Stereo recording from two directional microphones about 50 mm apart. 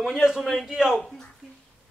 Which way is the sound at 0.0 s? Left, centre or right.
Centre.